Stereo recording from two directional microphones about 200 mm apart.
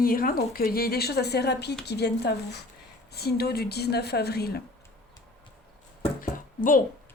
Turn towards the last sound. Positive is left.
turn(degrees=45)  # may be behind; listen again after turning